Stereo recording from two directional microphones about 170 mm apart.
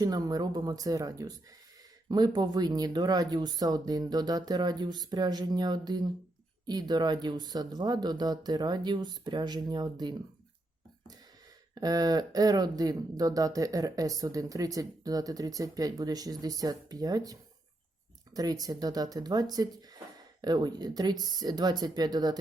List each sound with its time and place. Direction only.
0.0 s speech: 25° right (ahead or behind)
11.7 s speech: 20° right (ahead or behind)
18.3 s speech: 20° right (ahead or behind)